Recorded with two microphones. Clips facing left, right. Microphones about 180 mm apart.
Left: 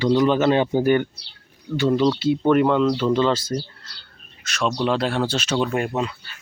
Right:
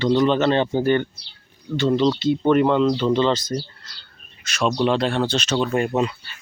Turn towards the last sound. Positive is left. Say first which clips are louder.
# right 1 dB
turn(degrees=5)  # may be behind; listen again after turning